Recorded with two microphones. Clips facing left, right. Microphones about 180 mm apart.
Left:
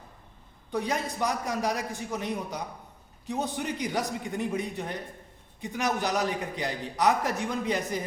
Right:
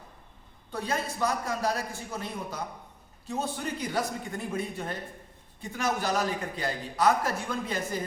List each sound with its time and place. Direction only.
0.7 s a man's voice: 15° left (ahead or behind)